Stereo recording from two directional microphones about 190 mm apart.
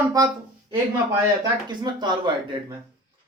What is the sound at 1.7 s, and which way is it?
Speech, 25° right (ahead or behind).